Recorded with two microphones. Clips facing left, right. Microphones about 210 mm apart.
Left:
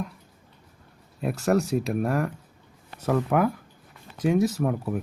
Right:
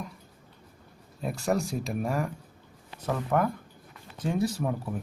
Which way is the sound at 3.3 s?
5° left (ahead or behind).